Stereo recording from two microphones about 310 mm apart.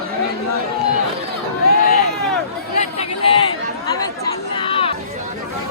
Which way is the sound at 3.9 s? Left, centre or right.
Centre.